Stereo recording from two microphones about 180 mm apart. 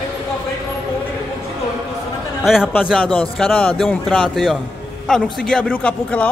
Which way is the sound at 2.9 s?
5° left (ahead or behind).